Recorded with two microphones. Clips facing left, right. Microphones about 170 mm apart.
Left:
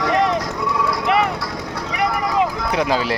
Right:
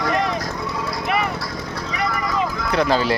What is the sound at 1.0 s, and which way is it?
Clip-clop, 70° left (ahead or behind).